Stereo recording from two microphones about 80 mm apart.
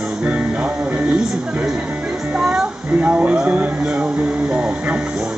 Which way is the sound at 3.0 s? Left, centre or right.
Centre.